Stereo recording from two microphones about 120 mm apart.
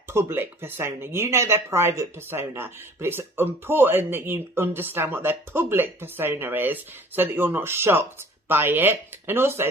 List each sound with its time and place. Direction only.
0.1 s speech: 20° right (ahead or behind)